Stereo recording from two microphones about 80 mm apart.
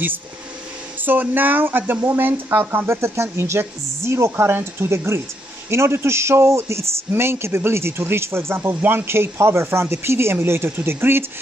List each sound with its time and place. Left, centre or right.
1.0 s a man's voice: right